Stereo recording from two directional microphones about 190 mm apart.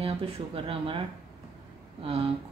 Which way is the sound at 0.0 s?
30° right (ahead or behind).